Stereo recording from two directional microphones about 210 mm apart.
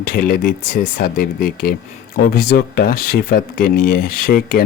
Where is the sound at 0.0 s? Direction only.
45° left (ahead or behind).